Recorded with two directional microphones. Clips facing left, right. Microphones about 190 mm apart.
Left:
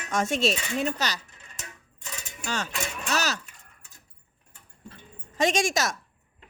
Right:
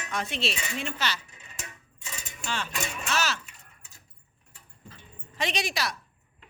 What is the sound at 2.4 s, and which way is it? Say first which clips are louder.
Speech: left 2 dB; 45° left (ahead or behind).